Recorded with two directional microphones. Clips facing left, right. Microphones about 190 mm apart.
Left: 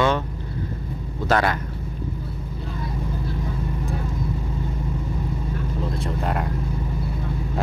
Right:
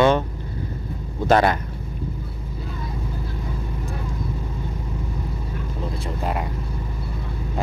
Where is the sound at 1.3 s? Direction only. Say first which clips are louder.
Right 4 dB; 20° right (ahead or behind).